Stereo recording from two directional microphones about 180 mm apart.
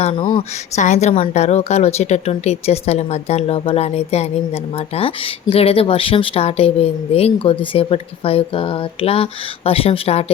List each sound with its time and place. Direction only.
0.0 s speech: 30° left (ahead or behind)
0.8 s speech: 40° left (ahead or behind)